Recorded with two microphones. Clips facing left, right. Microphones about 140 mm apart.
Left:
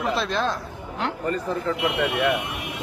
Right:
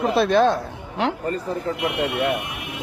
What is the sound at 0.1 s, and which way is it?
Speech, 60° right (ahead or behind).